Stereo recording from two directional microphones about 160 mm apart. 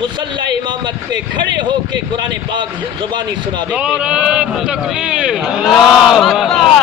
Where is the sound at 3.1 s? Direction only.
30° right (ahead or behind).